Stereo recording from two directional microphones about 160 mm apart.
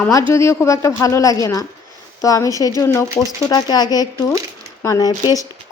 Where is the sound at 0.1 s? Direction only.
20° left (ahead or behind).